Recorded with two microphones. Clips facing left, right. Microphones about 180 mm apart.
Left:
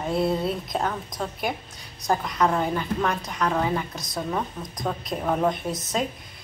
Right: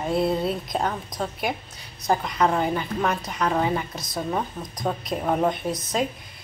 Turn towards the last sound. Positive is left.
turn(degrees=0)  # may be behind; listen again after turning